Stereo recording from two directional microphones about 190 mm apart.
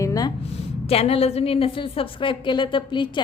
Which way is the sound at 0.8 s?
30° left (ahead or behind).